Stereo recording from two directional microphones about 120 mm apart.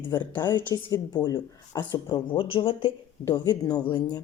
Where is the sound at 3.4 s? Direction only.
35° left (ahead or behind).